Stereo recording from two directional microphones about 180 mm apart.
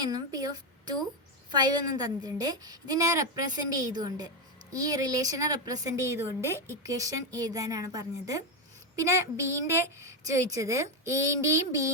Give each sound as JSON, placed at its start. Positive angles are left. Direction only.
{"t": 0.0, "sound": "a woman's voice", "side_deg": -20}